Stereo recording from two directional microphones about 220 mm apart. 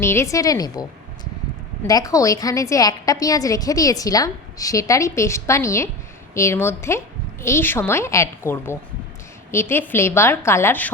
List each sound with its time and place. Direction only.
0.0 s a woman's voice: 10° left (ahead or behind)
1.9 s a woman's voice: 15° left (ahead or behind)